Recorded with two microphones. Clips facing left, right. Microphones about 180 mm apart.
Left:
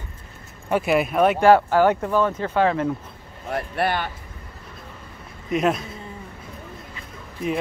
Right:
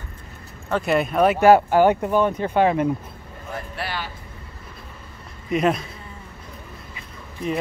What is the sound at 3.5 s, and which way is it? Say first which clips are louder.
Speech: left 7 dB; 55° left (ahead or behind).